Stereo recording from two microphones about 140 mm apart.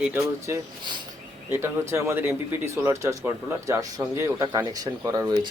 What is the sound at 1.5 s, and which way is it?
Speech, 20° right (ahead or behind).